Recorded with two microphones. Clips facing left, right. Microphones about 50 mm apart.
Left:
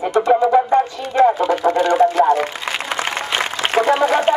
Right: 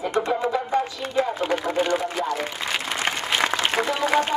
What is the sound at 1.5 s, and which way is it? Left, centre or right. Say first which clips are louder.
Speech: left 6 dB; right.